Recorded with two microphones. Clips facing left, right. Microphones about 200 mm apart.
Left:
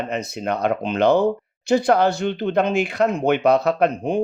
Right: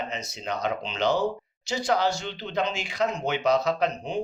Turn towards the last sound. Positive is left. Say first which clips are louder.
# left 7 dB
turn(degrees=55)  # may be behind; listen again after turning